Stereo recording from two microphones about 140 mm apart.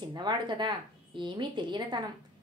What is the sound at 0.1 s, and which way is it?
A woman's voice, 30° right (ahead or behind).